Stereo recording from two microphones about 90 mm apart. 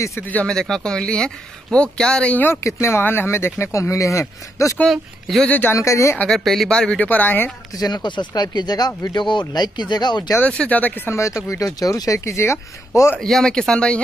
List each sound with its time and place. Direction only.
0.3 s speech: 10° left (ahead or behind)
2.6 s speech: 30° left (ahead or behind)
4.8 s speech: centre (ahead or behind)
5.5 s speech: 20° left (ahead or behind)
5.8 s speech: 35° left (ahead or behind)
6.1 s speech: 5° left (ahead or behind)
7.7 s speech: 50° left (ahead or behind)
10.4 s speech: 15° left (ahead or behind)
11.1 s speech: 35° left (ahead or behind)
13.2 s speech: 5° left (ahead or behind)